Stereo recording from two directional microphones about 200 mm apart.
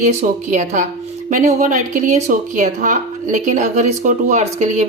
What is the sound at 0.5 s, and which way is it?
A woman's voice, 40° right (ahead or behind).